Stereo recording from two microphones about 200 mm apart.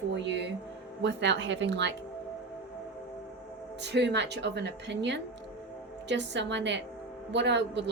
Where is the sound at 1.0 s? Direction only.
60° right (ahead or behind).